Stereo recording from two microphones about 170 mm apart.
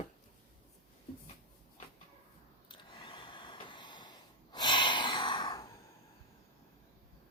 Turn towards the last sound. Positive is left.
turn(degrees=25)  # may be behind; listen again after turning